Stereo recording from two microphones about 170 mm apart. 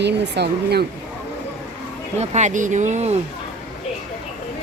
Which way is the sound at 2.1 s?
40° right (ahead or behind).